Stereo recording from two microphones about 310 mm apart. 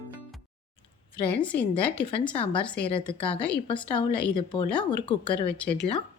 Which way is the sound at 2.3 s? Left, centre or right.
Centre.